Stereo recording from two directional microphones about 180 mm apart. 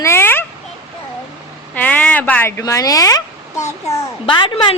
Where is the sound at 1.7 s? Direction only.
10° left (ahead or behind).